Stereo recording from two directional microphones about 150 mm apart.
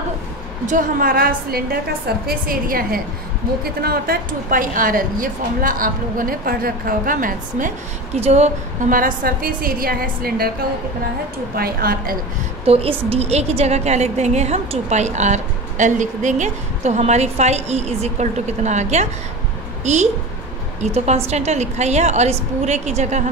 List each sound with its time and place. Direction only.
0.7 s a woman's voice: 65° right (ahead or behind); by 1.8 s 90° right
2.2 s a woman's voice: 75° right (ahead or behind)
3.6 s a woman's voice: 90° right; by 7.7 s 65° right (ahead or behind)
8.2 s a woman's voice: 50° right (ahead or behind); by 10.5 s 90° right
11.5 s a woman's voice: 90° right
12.6 s a woman's voice: 40° right (ahead or behind)